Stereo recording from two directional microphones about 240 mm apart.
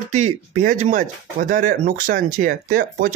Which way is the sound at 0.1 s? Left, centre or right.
Right.